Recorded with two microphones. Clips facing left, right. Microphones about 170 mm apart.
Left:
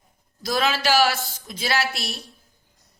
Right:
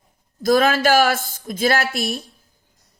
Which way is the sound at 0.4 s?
50° right (ahead or behind).